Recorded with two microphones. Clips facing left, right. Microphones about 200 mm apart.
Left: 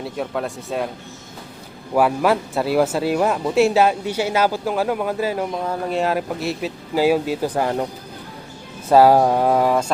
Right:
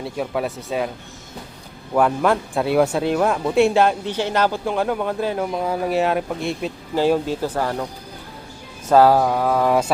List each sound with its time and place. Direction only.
0.0 s speech: centre (ahead or behind)
1.9 s speech: 5° left (ahead or behind)
5.5 s speech: 5° right (ahead or behind); by 7.9 s 15° left (ahead or behind)
8.9 s speech: 10° left (ahead or behind)
9.1 s speech: 25° left (ahead or behind)
9.6 s speech: 5° right (ahead or behind)